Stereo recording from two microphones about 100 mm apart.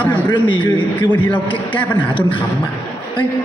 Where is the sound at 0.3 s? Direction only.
55° left (ahead or behind).